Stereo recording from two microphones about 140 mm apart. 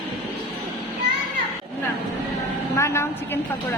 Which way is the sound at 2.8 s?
20° left (ahead or behind).